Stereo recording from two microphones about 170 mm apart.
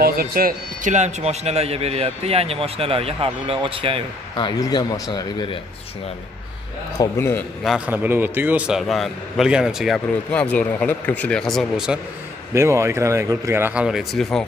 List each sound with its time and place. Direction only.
0.0 s a man's voice: 65° right (ahead or behind); by 4.0 s 30° right (ahead or behind)
4.4 s a man's voice: 25° left (ahead or behind)
7.0 s a man's voice: 15° left (ahead or behind)
7.6 s a man's voice: 5° right (ahead or behind)
12.5 s speech: 15° right (ahead or behind); by 14.4 s centre (ahead or behind)